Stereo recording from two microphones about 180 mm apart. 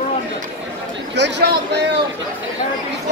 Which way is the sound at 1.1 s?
70° right (ahead or behind).